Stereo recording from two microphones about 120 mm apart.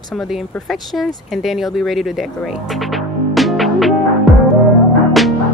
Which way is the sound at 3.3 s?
Centre (ahead or behind).